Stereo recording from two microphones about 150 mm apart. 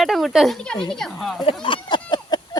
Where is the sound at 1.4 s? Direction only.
35° left (ahead or behind).